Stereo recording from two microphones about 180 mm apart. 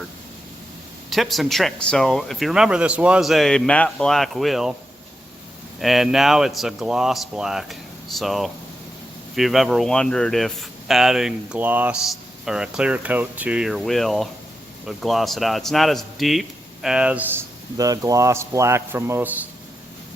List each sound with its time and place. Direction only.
1.1 s speech: centre (ahead or behind)
5.8 s speech: centre (ahead or behind)
17.7 s a man's voice: 20° right (ahead or behind)